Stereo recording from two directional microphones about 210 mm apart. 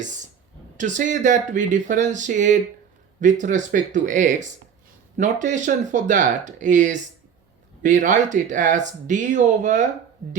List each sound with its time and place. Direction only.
0.8 s speech: 35° right (ahead or behind)